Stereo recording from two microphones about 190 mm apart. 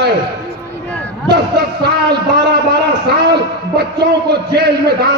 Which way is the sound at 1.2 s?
60° right (ahead or behind).